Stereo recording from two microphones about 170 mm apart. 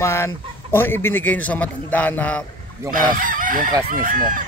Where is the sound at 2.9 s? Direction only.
55° right (ahead or behind).